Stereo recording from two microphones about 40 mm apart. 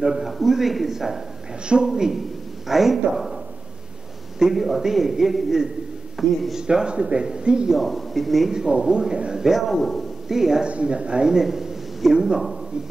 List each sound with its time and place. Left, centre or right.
0.0 s speech: centre
0.3 s speech: centre
4.4 s speech: centre
6.6 s a man's voice: right
7.7 s speech: centre
8.5 s a man's voice: right
9.5 s speech: centre
9.8 s a man's voice: centre
10.2 s a man's voice: centre
10.7 s a man's voice: right
11.2 s a man's voice: centre